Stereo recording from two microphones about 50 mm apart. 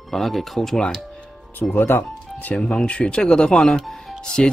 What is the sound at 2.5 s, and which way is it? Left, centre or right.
Speech, centre.